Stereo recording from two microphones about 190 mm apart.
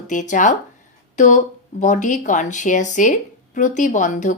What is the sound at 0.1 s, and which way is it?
Speech, 40° left (ahead or behind).